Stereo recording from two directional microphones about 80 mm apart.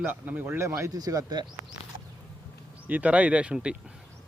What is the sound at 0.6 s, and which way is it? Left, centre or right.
Speech, right.